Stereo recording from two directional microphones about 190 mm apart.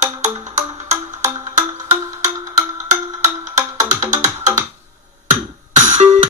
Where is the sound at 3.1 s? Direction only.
40° right (ahead or behind).